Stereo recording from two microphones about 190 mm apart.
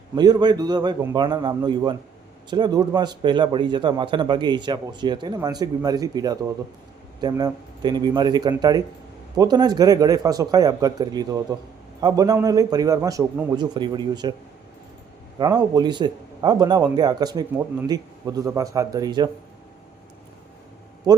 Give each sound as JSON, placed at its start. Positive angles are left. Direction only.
{"t": 0.2, "sound": "a man's voice", "side_deg": -20}
{"t": 15.4, "sound": "a man's voice", "side_deg": -20}